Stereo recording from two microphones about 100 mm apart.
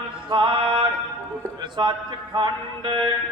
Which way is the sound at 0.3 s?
55° right (ahead or behind).